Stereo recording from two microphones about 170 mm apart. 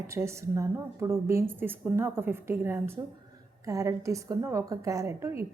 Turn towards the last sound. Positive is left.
turn(degrees=-15)  # may be behind; listen again after turning